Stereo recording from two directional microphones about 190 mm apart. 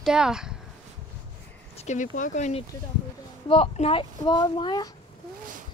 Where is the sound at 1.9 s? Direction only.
40° left (ahead or behind); by 4.8 s 25° left (ahead or behind).